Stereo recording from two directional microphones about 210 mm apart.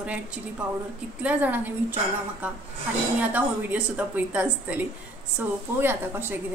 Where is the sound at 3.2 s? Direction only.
5° right (ahead or behind).